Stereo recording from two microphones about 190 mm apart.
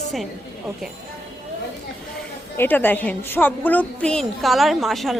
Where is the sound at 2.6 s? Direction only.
10° left (ahead or behind).